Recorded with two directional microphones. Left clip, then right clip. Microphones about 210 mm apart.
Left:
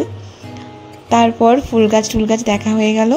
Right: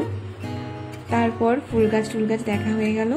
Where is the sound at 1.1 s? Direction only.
35° left (ahead or behind).